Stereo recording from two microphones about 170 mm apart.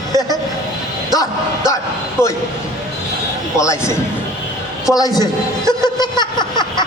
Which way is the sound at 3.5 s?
15° left (ahead or behind).